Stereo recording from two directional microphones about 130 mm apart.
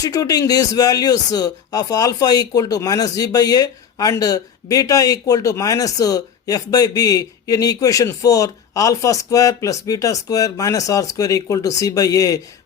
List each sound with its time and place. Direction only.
0.0 s speech: 30° left (ahead or behind)